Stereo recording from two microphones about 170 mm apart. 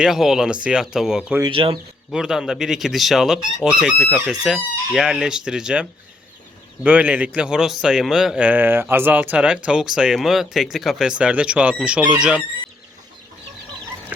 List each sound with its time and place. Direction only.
0.0 s fowl: centre (ahead or behind)
1.4 s speech: 30° right (ahead or behind)
2.0 s fowl: 5° right (ahead or behind)
6.8 s a man's voice: 10° right (ahead or behind)
9.6 s fowl: 5° right (ahead or behind)
11.2 s a man's voice: 5° right (ahead or behind)